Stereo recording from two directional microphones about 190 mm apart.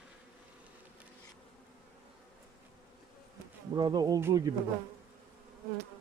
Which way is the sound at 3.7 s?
20° right (ahead or behind).